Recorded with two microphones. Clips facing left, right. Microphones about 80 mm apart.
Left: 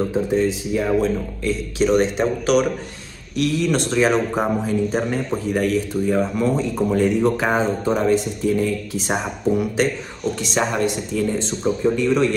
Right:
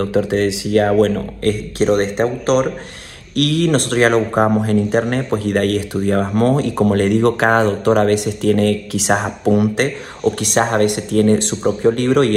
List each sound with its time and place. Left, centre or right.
0.0 s speech: right
3.3 s speech: right